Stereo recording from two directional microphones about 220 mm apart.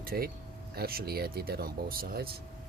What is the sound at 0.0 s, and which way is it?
Speech, 40° right (ahead or behind).